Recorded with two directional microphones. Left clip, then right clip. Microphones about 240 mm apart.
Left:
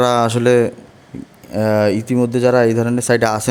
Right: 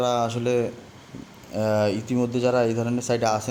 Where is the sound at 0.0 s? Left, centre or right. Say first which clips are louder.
Left 9 dB; left.